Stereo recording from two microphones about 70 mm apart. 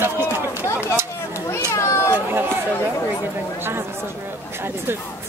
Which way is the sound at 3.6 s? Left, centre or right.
Right.